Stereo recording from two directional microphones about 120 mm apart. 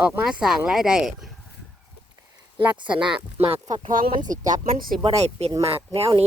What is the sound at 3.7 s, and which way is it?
Speech, 90° right.